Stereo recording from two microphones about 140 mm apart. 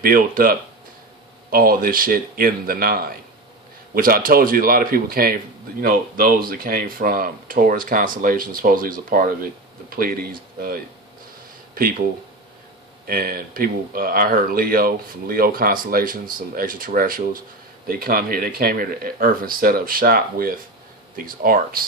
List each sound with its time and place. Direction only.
0.0 s speech: 90° right
11.7 s speech: 90° right